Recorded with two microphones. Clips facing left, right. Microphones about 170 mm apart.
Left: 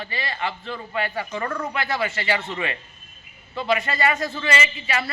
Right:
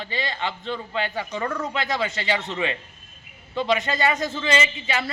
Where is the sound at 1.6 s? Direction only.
20° right (ahead or behind).